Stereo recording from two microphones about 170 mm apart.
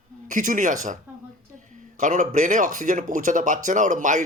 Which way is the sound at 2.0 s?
45° right (ahead or behind).